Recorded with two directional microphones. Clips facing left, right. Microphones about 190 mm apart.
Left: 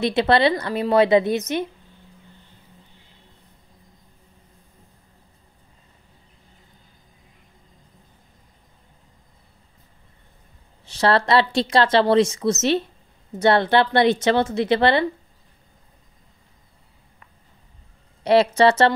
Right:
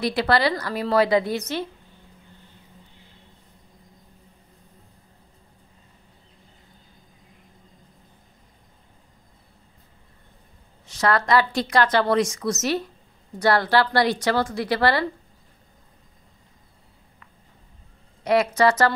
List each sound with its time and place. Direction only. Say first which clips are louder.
0.0 s a woman's voice: left 3 dB; 25° left (ahead or behind)
10.9 s a woman's voice: left 2 dB; 30° left (ahead or behind)
18.2 s a woman's voice: left 3 dB; 30° left (ahead or behind)